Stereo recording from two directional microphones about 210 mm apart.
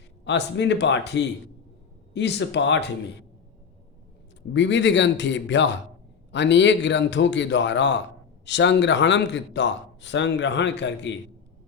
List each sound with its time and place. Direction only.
0.3 s a man's voice: 55° left (ahead or behind)
4.5 s a man's voice: 60° left (ahead or behind)